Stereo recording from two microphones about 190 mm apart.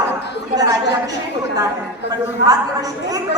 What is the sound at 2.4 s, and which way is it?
Speech, 20° right (ahead or behind).